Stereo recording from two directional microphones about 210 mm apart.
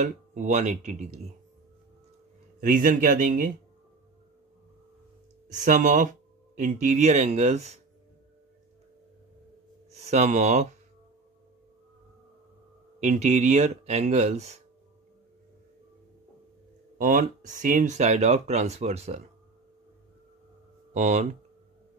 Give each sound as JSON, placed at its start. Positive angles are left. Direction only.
{"t": 0.0, "sound": "speech", "side_deg": -35}
{"t": 2.6, "sound": "speech", "side_deg": -40}
{"t": 5.5, "sound": "speech", "side_deg": -40}
{"t": 9.8, "sound": "speech", "side_deg": -30}
{"t": 13.0, "sound": "speech", "side_deg": -35}
{"t": 17.0, "sound": "speech", "side_deg": -40}
{"t": 20.9, "sound": "speech", "side_deg": -35}